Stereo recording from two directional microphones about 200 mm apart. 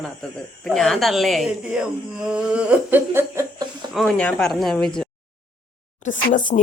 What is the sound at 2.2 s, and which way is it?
Humming, 5° right (ahead or behind).